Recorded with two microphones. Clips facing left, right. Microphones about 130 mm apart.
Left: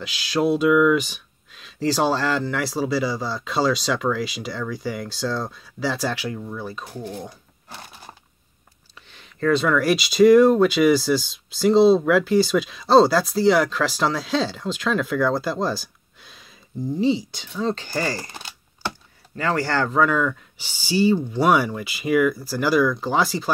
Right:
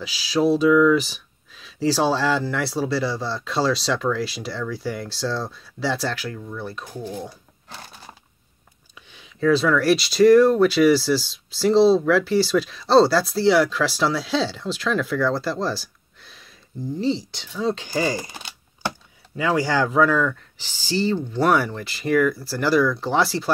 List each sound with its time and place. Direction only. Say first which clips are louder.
0.0 s speech: right 1 dB; centre (ahead or behind)
6.0 s speech: left 2 dB; 15° left (ahead or behind)
6.6 s speech: even; centre (ahead or behind)
7.1 s dog: right 1 dB; 5° right (ahead or behind)
9.1 s speech: right 1 dB; 5° right (ahead or behind)
16.9 s speech: left 3 dB; 15° left (ahead or behind)
17.4 s speech: right 1 dB; centre (ahead or behind)
20.5 s speech: left 2 dB; 15° left (ahead or behind)